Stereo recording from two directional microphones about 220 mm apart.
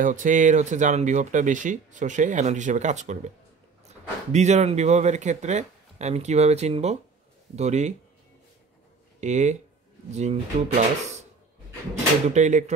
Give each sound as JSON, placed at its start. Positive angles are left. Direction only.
{"t": 0.0, "sound": "speech", "side_deg": -35}
{"t": 9.2, "sound": "speech", "side_deg": -30}
{"t": 12.3, "sound": "speech", "side_deg": -35}